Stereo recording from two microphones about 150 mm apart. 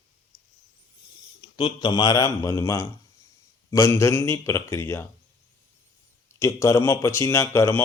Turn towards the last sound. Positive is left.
turn(degrees=20)  # may be behind; listen again after turning